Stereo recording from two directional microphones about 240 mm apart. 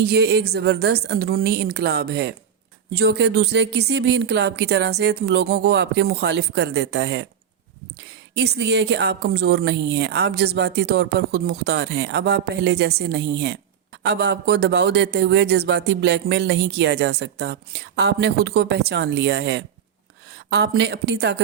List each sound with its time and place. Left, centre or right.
0.0 s a woman's voice: right
8.4 s speech: right